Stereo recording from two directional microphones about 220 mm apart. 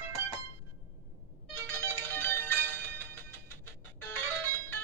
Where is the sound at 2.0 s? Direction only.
10° left (ahead or behind).